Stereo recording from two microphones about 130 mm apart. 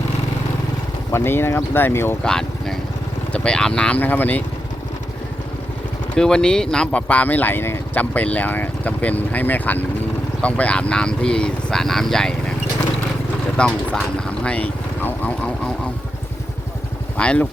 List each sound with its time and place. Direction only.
1.1 s speech: 20° left (ahead or behind)
2.2 s speech: 5° left (ahead or behind)
6.1 s speech: 5° left (ahead or behind)
13.7 s speech: 5° left (ahead or behind)
17.2 s speech: 10° left (ahead or behind)